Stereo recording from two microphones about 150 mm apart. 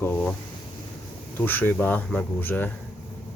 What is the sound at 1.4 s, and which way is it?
Speech, 15° left (ahead or behind).